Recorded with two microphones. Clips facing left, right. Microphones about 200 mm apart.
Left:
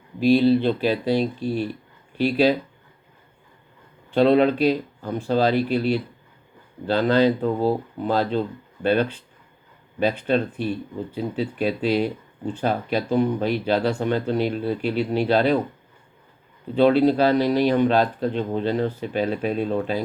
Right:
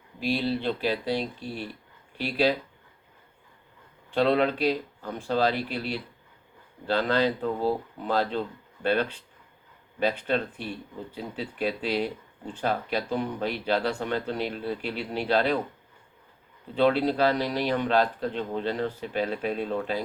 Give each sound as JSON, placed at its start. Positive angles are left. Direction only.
{"t": 0.3, "sound": "speech", "side_deg": 25}
{"t": 2.1, "sound": "speech", "side_deg": 25}
{"t": 4.1, "sound": "speech", "side_deg": 25}
{"t": 16.7, "sound": "speech", "side_deg": 25}